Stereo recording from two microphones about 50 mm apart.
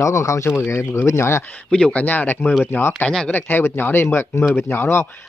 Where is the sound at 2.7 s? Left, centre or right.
Left.